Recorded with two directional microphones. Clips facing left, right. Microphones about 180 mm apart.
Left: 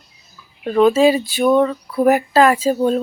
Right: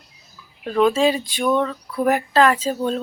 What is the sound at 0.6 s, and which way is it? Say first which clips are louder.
Speech: left 5 dB; 5° left (ahead or behind).